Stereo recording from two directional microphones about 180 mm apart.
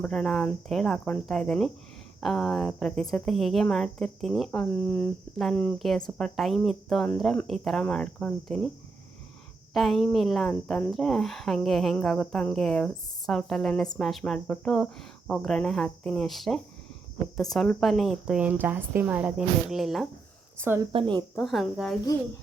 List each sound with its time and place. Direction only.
0.0 s speech: 5° left (ahead or behind)
9.7 s speech: centre (ahead or behind)
20.6 s a woman's voice: 15° right (ahead or behind)
20.9 s speech: 25° right (ahead or behind)
21.3 s speech: centre (ahead or behind)